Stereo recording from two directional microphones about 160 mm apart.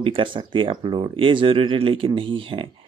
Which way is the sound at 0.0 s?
30° right (ahead or behind).